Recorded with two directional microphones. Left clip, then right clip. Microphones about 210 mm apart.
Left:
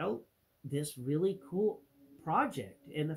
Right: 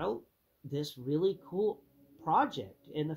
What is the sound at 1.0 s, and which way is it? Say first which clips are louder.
Speech: right 2 dB; centre (ahead or behind).